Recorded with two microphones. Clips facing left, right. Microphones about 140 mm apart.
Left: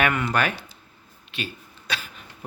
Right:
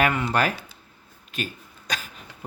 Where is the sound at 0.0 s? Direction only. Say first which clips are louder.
Right 1 dB; 25° right (ahead or behind).